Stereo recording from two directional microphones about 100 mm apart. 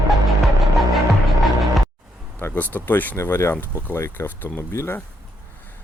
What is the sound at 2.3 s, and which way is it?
Speech, 20° left (ahead or behind).